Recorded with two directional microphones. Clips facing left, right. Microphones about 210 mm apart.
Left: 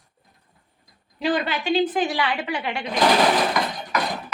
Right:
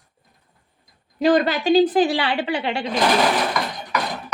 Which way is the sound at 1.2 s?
40° right (ahead or behind).